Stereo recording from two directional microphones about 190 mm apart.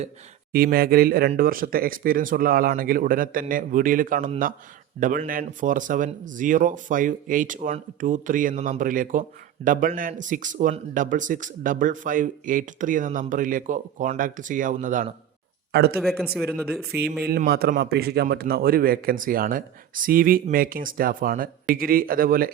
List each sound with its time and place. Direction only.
0.5 s speech: 55° right (ahead or behind)
15.7 s speech: 55° right (ahead or behind)
16.0 s speech: centre (ahead or behind)
16.9 s speech: 55° right (ahead or behind)